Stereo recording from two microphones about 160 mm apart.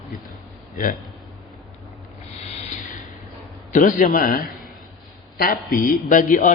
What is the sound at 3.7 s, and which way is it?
Speech, 55° left (ahead or behind).